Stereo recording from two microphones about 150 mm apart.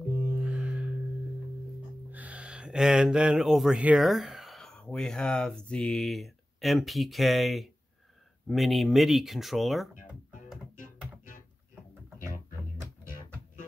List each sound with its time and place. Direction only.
0.1 s music: 15° left (ahead or behind)
0.4 s music: 5° right (ahead or behind)
2.0 s a sound: 10° right (ahead or behind)
8.5 s speech: centre (ahead or behind)